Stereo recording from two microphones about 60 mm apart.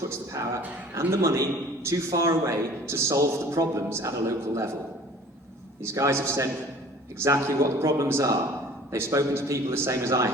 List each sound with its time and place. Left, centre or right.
0.0 s a sound: right
0.9 s a man's voice: right
5.8 s a man's voice: right